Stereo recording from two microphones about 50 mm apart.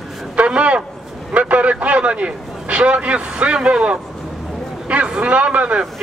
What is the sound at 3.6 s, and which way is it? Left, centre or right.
Speech, centre.